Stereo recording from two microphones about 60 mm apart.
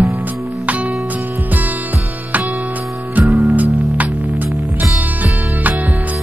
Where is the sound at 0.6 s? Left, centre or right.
Right.